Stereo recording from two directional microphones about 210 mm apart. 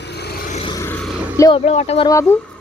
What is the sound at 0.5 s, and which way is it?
Vehicle, 25° left (ahead or behind).